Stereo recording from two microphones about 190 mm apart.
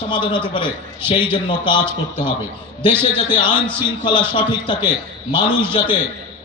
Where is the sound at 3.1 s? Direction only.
25° left (ahead or behind).